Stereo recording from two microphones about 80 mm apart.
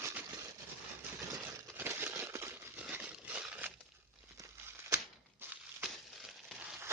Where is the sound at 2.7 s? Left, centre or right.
Centre.